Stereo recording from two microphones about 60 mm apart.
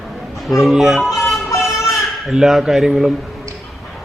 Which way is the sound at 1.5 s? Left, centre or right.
Left.